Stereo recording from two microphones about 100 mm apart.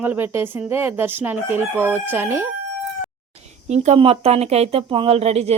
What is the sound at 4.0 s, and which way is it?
Speech, 85° right.